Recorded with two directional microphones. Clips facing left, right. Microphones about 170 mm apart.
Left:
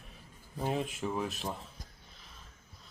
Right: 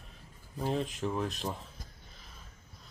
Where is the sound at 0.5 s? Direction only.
10° left (ahead or behind).